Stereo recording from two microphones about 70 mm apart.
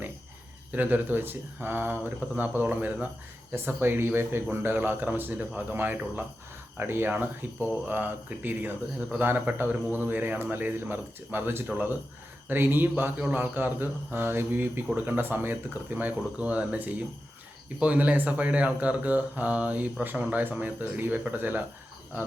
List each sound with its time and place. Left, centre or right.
0.7 s speech: right